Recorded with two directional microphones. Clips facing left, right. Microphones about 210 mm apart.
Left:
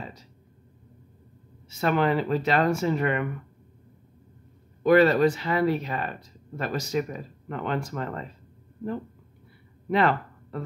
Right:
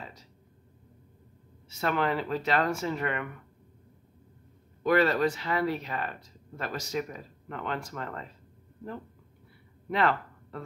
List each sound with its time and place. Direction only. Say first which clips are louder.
1.8 s speech: left 5 dB; 15° left (ahead or behind)
4.8 s speech: left 6 dB; 15° left (ahead or behind)
9.8 s speech: left 4 dB; 20° left (ahead or behind)